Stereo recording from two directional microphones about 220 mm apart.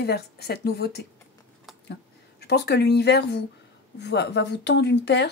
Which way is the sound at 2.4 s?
50° left (ahead or behind).